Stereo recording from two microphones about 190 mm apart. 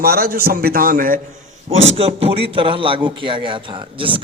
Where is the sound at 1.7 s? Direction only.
35° right (ahead or behind).